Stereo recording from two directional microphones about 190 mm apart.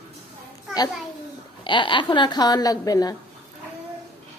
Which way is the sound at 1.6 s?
25° left (ahead or behind).